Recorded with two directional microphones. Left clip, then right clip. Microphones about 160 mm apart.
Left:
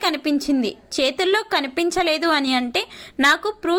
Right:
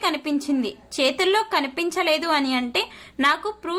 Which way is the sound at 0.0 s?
25° left (ahead or behind).